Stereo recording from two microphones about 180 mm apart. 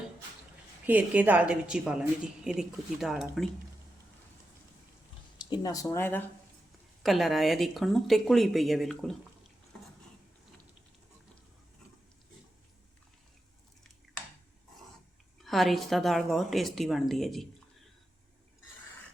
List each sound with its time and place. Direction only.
0.9 s a woman's voice: 10° right (ahead or behind)
5.5 s speech: 20° left (ahead or behind)
7.0 s a woman's voice: centre (ahead or behind)
15.4 s a woman's voice: centre (ahead or behind)